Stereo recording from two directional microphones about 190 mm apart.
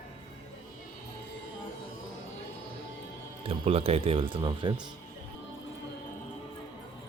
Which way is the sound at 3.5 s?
30° right (ahead or behind).